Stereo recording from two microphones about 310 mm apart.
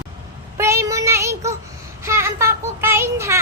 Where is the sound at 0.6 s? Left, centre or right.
Centre.